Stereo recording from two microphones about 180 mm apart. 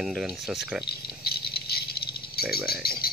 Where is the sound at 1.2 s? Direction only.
60° left (ahead or behind).